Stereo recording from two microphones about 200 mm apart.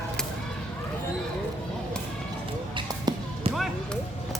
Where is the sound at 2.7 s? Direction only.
20° right (ahead or behind).